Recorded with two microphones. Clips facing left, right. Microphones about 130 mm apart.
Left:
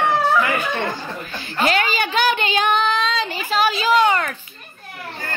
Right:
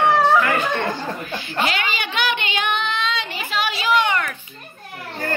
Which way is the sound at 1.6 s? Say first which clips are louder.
Left 5 dB; 40° left (ahead or behind).